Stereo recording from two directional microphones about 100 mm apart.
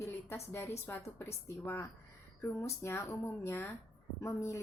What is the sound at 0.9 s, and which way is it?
A woman's voice, 30° left (ahead or behind).